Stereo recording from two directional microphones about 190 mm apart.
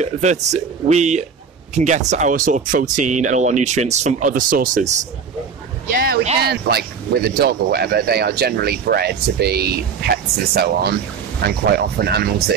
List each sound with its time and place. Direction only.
0.0 s speech: 35° right (ahead or behind)
6.5 s speech: 55° right (ahead or behind)